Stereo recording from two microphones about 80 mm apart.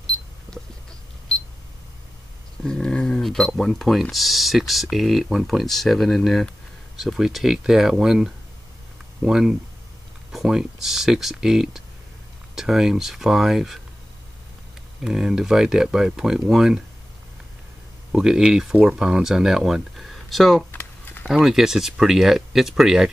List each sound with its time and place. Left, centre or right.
2.6 s speech: centre
15.0 s speech: centre
18.1 s speech: centre
20.7 s a sound: left
21.3 s speech: centre